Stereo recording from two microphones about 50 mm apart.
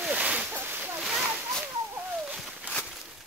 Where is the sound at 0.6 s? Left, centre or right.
Right.